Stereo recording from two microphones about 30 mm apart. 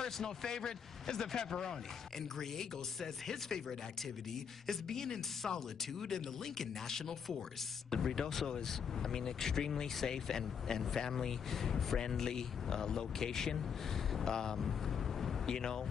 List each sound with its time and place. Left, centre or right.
0.0 s a man's voice: centre
4.6 s a man's voice: centre